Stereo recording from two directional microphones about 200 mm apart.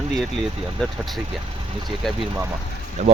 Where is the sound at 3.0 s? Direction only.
35° right (ahead or behind).